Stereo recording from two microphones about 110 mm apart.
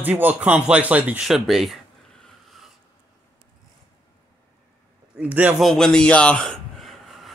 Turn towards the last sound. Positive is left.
turn(degrees=0)  # may be behind; listen again after turning